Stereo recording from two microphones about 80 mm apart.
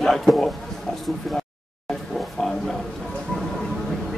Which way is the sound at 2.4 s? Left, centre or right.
Centre.